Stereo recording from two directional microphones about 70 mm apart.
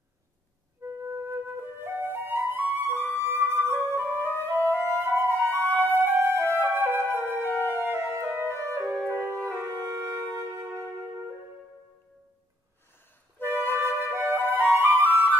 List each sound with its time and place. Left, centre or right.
0.8 s flute: right
4.2 s flute: left
4.9 s flute: right
5.9 s music: right
7.0 s music: left
7.9 s music: right
13.4 s music: right
14.5 s flute: right